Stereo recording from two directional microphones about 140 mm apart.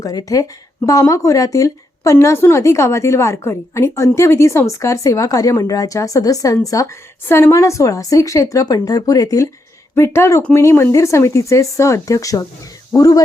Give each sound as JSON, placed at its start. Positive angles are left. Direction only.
{"t": 0.0, "sound": "a woman's voice", "side_deg": 25}